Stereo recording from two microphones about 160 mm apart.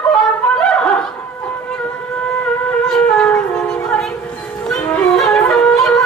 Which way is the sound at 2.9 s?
5° left (ahead or behind).